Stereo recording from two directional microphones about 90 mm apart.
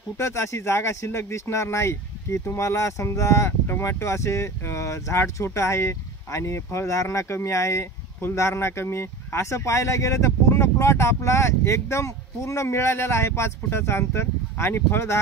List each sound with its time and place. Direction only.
0.2 s speech: 30° left (ahead or behind)